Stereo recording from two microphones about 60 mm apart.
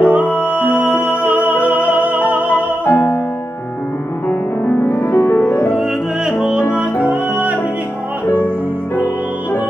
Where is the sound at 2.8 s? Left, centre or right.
Left.